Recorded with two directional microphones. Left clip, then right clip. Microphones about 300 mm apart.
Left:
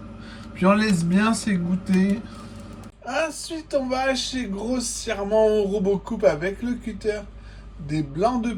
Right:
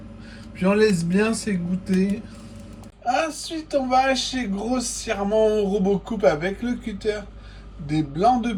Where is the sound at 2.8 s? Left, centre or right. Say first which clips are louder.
Right 3 dB; centre.